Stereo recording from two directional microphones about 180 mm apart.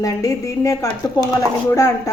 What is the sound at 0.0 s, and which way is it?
A woman's voice, 15° left (ahead or behind).